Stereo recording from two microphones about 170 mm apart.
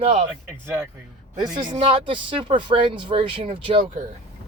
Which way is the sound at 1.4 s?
25° right (ahead or behind).